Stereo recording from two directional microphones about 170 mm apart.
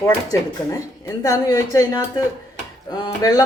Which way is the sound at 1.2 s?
20° left (ahead or behind).